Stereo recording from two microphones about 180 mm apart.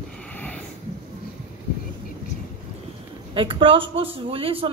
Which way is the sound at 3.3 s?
30° right (ahead or behind).